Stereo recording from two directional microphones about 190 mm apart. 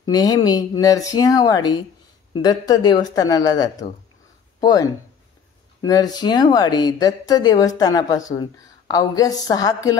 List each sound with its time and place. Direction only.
0.0 s speech: 20° left (ahead or behind)